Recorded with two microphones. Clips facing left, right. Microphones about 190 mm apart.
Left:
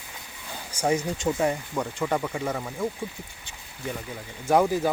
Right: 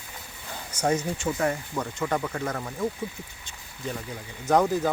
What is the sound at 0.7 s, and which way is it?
Speech, 10° left (ahead or behind).